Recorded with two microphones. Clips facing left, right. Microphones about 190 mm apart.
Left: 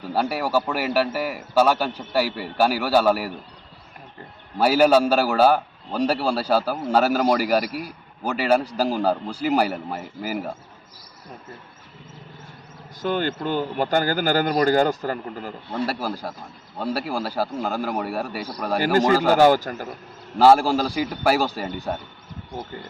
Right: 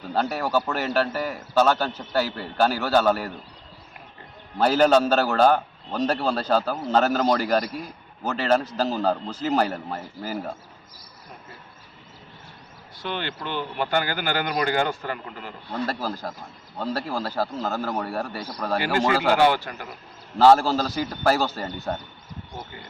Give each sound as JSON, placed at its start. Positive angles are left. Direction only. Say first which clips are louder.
{"t": 0.0, "sound": "a man's voice", "louder": "left 1 dB", "side_deg": 10}
{"t": 4.5, "sound": "a man's voice", "louder": "left 2 dB", "side_deg": 10}
{"t": 13.0, "sound": "speech", "louder": "left 7 dB", "side_deg": 45}
{"t": 15.9, "sound": "a man's voice", "louder": "left 1 dB", "side_deg": 10}
{"t": 18.8, "sound": "speech", "louder": "left 5 dB", "side_deg": 40}
{"t": 20.4, "sound": "a man's voice", "louder": "left 1 dB", "side_deg": 10}